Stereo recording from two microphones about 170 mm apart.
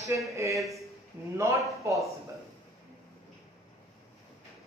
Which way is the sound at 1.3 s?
15° right (ahead or behind).